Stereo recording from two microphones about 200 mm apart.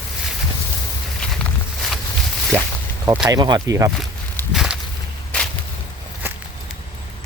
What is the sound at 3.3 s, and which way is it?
Speech, 20° right (ahead or behind).